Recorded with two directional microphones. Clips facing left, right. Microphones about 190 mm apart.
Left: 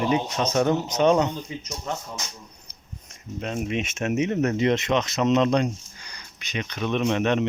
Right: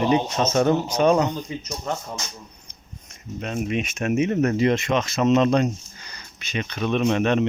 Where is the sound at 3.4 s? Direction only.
25° left (ahead or behind).